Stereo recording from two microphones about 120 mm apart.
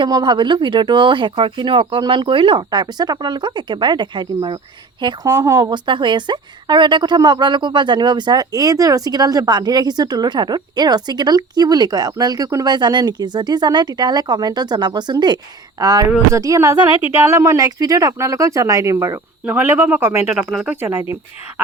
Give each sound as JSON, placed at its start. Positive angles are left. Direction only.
{"t": 0.0, "sound": "speech", "side_deg": -40}
{"t": 2.6, "sound": "speech", "side_deg": -35}
{"t": 5.2, "sound": "speech", "side_deg": -25}
{"t": 5.7, "sound": "speech", "side_deg": -40}
{"t": 20.3, "sound": "speech", "side_deg": -5}
{"t": 20.8, "sound": "speech", "side_deg": -25}